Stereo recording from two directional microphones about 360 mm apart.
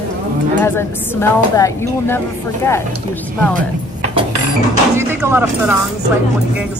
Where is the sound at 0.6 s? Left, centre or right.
Centre.